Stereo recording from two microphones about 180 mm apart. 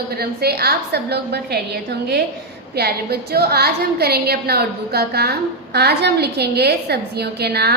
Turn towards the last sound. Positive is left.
turn(degrees=-65)  # may be behind; listen again after turning